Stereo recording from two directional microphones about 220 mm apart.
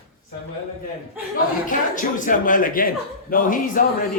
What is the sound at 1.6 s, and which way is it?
A man's voice, 35° left (ahead or behind).